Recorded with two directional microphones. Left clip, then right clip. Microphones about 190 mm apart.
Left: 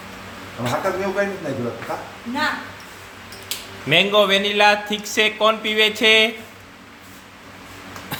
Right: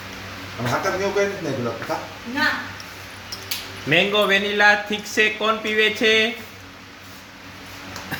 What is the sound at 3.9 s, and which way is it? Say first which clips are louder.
Speech: left 2 dB; 15° left (ahead or behind).